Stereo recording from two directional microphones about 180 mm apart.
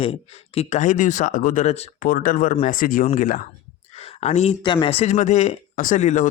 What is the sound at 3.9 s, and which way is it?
Speech, 35° left (ahead or behind).